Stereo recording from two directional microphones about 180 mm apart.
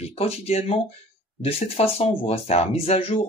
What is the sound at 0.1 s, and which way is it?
Speech, 35° left (ahead or behind).